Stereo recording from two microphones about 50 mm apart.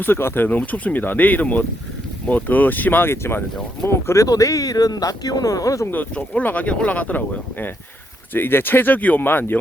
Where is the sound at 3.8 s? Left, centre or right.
Left.